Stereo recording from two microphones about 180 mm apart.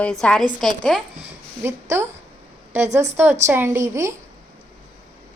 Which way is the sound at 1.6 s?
15° right (ahead or behind).